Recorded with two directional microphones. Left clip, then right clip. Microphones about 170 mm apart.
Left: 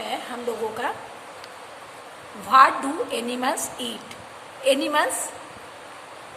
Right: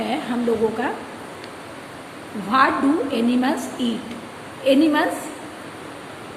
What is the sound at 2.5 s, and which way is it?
A woman's voice, 35° left (ahead or behind).